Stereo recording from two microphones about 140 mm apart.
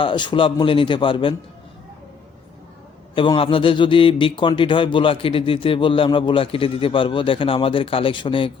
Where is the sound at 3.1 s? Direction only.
40° left (ahead or behind).